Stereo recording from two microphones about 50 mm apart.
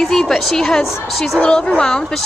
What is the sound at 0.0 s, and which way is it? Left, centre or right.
Speech, centre.